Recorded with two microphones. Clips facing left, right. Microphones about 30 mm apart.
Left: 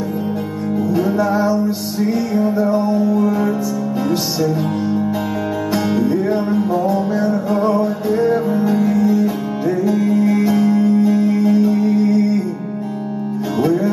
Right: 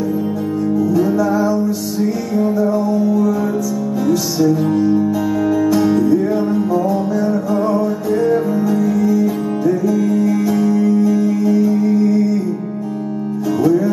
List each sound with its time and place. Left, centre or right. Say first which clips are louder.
0.7 s music: right 1 dB; left
5.7 s music: right 2 dB; left